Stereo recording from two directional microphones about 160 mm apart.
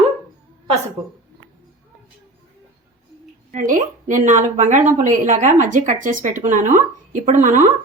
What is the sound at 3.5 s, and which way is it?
A woman's voice, 55° right (ahead or behind).